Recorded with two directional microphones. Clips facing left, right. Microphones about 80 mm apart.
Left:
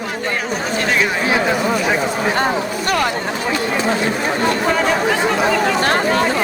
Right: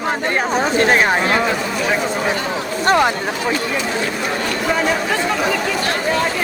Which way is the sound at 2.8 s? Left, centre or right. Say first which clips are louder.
Right 5 dB; right.